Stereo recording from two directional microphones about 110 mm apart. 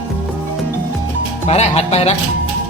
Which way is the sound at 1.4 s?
75° left (ahead or behind).